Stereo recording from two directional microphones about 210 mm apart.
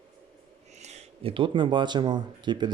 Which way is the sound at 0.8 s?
30° right (ahead or behind).